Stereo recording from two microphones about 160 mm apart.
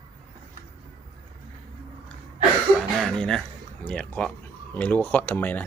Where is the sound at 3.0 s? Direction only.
5° left (ahead or behind).